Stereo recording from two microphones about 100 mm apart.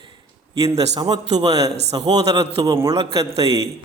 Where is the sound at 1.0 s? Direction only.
45° right (ahead or behind).